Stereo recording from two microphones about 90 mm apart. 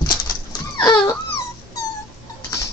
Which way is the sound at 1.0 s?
30° left (ahead or behind).